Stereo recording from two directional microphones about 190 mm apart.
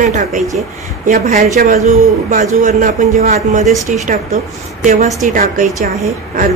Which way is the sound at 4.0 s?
40° right (ahead or behind).